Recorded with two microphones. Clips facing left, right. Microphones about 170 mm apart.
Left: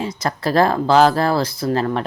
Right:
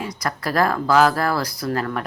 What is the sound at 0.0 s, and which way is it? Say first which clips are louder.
A woman's voice: left 4 dB; 25° left (ahead or behind).